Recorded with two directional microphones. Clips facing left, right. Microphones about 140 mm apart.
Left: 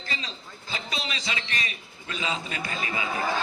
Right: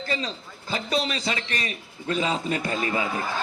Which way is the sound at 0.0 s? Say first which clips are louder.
Right 8 dB; 45° right (ahead or behind).